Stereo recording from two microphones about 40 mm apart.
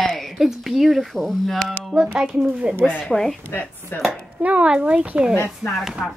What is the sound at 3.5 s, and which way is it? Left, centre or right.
Speech, left.